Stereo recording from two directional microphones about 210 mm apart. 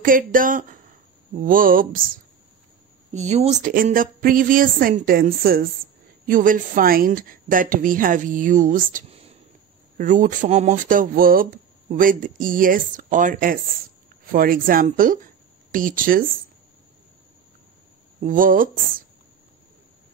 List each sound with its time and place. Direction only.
0.0 s speech: 40° right (ahead or behind)
18.2 s speech: 40° right (ahead or behind)